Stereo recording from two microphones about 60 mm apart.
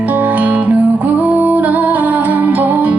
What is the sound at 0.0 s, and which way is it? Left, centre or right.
Music, right.